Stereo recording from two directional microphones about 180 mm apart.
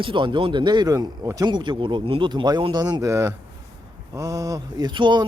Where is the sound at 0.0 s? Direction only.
30° right (ahead or behind).